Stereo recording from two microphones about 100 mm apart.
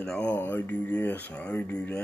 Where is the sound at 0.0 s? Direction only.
10° left (ahead or behind).